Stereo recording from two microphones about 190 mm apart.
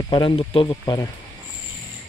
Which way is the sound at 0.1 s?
25° left (ahead or behind).